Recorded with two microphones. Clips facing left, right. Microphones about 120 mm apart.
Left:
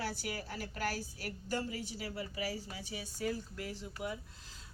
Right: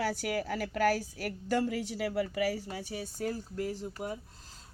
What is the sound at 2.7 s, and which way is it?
Speech, 50° right (ahead or behind).